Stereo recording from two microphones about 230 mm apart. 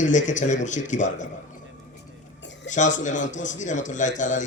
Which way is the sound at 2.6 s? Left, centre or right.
Left.